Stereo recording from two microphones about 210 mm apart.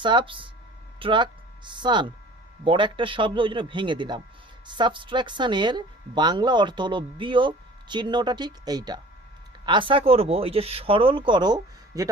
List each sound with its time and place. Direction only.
0.0 s speech: 25° right (ahead or behind)